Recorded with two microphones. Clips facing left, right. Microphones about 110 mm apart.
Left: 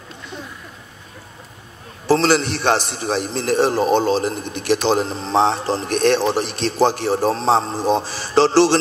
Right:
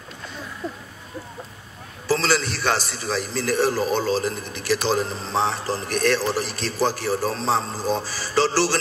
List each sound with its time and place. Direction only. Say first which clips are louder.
2.0 s a man's voice: left 6 dB; 25° left (ahead or behind)